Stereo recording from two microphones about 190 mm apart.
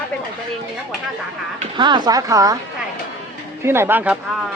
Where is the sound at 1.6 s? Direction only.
25° right (ahead or behind).